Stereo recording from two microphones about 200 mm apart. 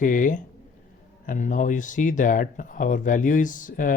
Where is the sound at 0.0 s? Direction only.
40° left (ahead or behind).